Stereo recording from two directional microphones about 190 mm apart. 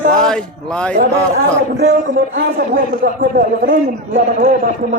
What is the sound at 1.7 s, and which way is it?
Speech, 65° right (ahead or behind).